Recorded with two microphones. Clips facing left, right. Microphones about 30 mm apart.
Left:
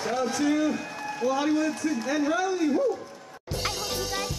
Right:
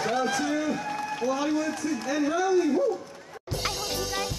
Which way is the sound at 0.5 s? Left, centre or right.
Centre.